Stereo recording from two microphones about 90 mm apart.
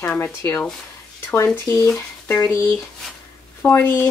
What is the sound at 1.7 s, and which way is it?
Speech, 35° left (ahead or behind).